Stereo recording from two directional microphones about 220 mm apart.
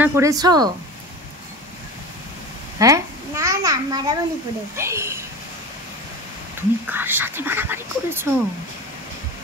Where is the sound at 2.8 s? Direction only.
15° right (ahead or behind).